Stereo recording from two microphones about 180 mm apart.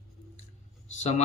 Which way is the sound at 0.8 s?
40° left (ahead or behind).